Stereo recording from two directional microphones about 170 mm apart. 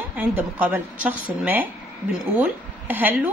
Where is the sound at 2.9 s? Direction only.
10° right (ahead or behind).